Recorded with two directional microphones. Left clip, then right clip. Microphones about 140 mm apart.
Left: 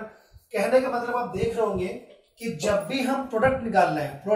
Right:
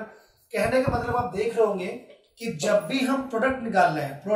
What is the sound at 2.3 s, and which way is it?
Speech, 35° right (ahead or behind).